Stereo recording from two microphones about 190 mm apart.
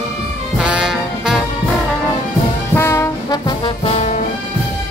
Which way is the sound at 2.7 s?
15° left (ahead or behind).